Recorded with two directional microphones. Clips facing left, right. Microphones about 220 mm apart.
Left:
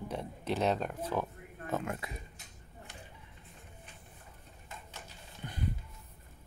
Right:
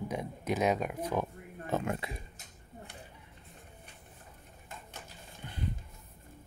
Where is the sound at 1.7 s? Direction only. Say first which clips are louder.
Right 3 dB; 25° right (ahead or behind).